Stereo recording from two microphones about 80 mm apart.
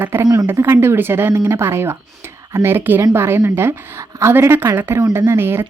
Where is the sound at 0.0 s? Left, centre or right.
Right.